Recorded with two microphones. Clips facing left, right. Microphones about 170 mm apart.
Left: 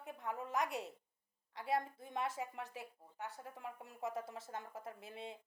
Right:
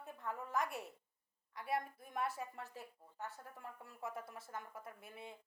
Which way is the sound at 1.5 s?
25° left (ahead or behind).